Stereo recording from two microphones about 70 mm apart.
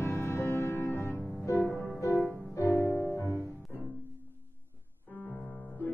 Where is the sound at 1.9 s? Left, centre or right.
Left.